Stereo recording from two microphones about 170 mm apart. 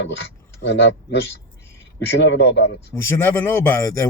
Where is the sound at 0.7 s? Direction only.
90° left.